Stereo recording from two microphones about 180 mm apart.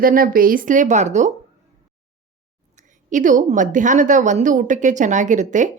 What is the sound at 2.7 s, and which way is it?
A woman's voice, 45° right (ahead or behind).